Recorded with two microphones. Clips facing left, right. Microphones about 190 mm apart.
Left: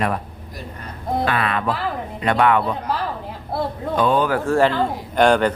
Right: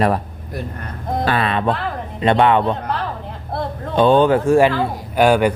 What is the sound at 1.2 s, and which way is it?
Speech, 30° right (ahead or behind).